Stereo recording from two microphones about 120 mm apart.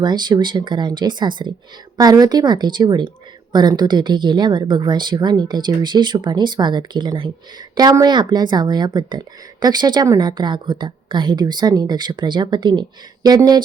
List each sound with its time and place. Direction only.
0.0 s a woman's voice: 35° right (ahead or behind)